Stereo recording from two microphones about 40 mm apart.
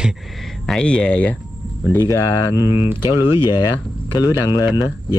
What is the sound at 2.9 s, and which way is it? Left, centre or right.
Speech, right.